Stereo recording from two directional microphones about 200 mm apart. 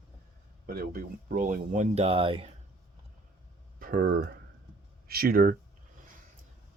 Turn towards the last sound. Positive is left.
turn(degrees=-45)  # may be behind; listen again after turning